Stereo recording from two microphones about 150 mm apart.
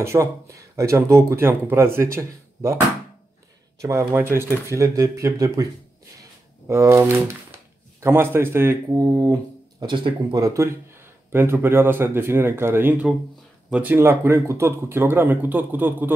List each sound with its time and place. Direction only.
0.0 s speech: 20° right (ahead or behind)
3.8 s speech: 15° right (ahead or behind)
6.7 s speech: 20° right (ahead or behind)